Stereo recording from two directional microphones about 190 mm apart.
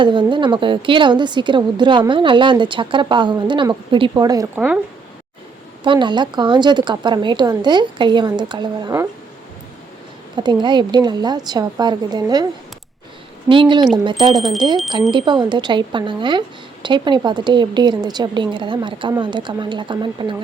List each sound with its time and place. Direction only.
0.0 s a woman's voice: 25° right (ahead or behind)
5.8 s a woman's voice: 25° right (ahead or behind)
10.3 s a woman's voice: 25° right (ahead or behind)
13.5 s a woman's voice: 25° right (ahead or behind)
14.3 s speech: centre (ahead or behind)
15.1 s a woman's voice: 25° right (ahead or behind)